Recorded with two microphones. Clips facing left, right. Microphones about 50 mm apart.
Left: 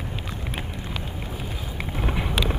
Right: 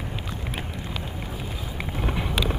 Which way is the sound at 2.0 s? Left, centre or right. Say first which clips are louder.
Left 1 dB; centre.